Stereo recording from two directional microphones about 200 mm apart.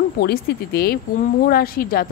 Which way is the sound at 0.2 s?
50° left (ahead or behind).